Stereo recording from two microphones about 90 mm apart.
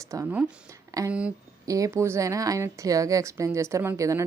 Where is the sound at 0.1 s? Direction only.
40° right (ahead or behind).